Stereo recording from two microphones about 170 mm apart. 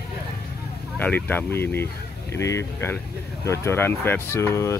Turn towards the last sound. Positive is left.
turn(degrees=15)  # may be behind; listen again after turning